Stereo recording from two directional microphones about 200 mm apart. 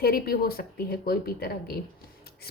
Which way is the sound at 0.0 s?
50° left (ahead or behind).